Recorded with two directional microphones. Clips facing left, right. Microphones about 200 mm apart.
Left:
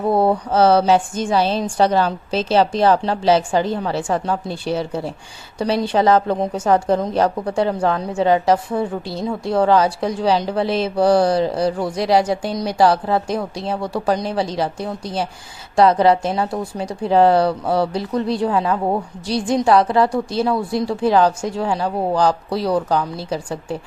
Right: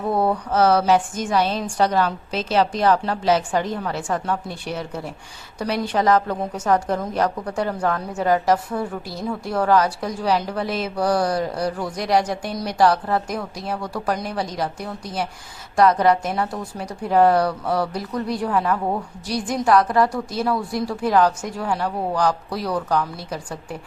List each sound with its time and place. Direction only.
0.1 s a woman's voice: 30° left (ahead or behind)